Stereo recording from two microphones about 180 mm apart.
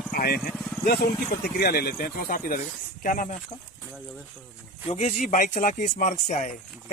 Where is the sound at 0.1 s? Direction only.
55° left (ahead or behind).